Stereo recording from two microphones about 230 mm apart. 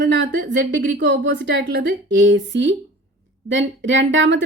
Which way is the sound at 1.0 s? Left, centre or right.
Right.